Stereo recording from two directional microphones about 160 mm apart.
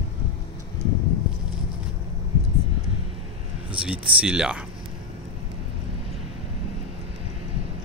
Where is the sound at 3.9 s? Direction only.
5° right (ahead or behind).